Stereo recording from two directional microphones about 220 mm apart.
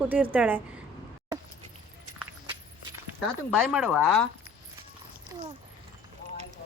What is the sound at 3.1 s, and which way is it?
Speech, centre (ahead or behind).